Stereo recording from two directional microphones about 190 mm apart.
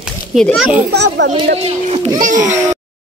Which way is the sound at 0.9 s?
70° right (ahead or behind).